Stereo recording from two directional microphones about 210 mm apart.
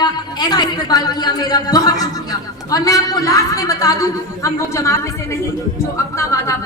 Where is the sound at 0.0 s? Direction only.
20° left (ahead or behind).